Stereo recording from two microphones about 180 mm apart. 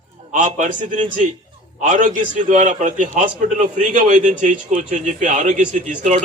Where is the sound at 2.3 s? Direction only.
45° right (ahead or behind).